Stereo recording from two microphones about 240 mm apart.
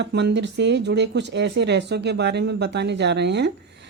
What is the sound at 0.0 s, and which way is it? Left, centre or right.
Speech, right.